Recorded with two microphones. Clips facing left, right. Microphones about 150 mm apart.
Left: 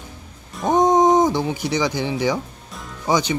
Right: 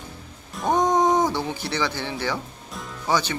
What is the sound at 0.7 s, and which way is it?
Speech, 20° left (ahead or behind).